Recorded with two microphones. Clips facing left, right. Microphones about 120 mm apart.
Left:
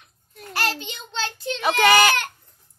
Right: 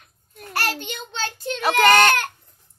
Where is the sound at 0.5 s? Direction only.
55° right (ahead or behind).